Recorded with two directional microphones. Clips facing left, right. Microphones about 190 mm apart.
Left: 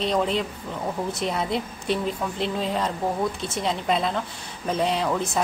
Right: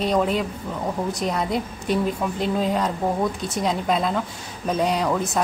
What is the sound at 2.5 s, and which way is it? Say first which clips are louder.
Speech: right 3 dB; centre (ahead or behind).